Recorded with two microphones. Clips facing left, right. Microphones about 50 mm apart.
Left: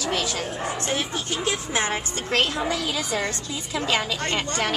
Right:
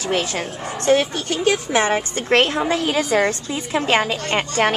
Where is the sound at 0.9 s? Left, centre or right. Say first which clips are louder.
Right 7 dB; right.